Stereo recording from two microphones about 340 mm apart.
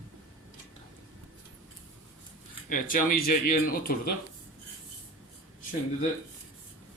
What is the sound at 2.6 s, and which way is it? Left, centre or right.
Speech, left.